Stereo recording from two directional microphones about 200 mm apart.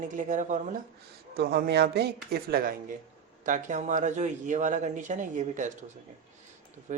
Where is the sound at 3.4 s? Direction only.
40° right (ahead or behind).